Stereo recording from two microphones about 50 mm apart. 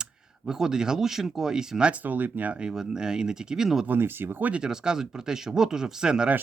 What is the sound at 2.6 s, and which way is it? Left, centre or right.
Speech, centre.